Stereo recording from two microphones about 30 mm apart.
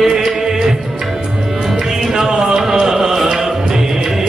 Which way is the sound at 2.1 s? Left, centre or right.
Centre.